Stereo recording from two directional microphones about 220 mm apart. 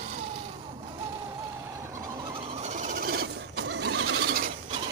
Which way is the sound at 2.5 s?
30° right (ahead or behind).